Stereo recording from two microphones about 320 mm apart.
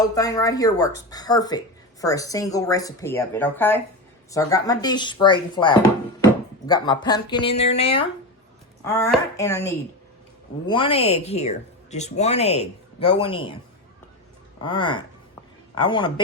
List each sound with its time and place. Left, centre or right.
0.0 s a woman's voice: centre
14.6 s a woman's voice: centre